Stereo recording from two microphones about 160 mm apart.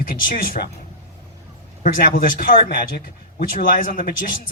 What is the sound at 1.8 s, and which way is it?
Speech, 60° left (ahead or behind).